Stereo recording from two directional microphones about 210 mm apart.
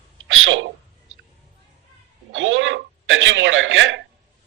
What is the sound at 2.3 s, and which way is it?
A man's voice, 65° right (ahead or behind).